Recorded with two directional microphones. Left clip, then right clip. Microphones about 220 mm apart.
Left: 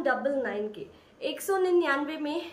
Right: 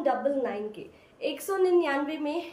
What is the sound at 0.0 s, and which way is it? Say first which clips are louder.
A woman's voice: right 1 dB; 15° left (ahead or behind).